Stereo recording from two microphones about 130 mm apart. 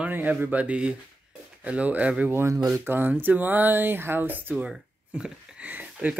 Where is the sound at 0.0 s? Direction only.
10° right (ahead or behind).